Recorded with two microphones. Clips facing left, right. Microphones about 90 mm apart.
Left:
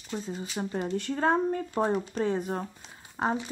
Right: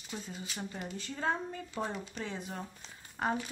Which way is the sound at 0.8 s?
60° left (ahead or behind).